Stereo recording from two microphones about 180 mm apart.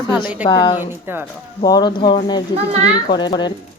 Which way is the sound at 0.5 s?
25° left (ahead or behind).